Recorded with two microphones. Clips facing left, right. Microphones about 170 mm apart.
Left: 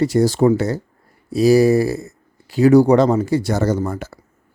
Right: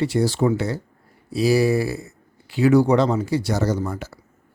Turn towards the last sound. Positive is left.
turn(degrees=50)  # may be behind; listen again after turning